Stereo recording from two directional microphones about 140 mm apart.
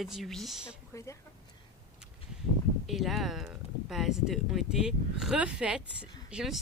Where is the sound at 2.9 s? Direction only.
Centre (ahead or behind).